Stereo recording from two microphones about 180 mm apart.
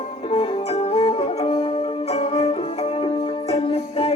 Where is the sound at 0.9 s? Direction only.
35° left (ahead or behind).